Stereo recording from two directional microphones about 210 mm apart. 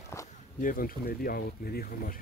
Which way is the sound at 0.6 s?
40° left (ahead or behind).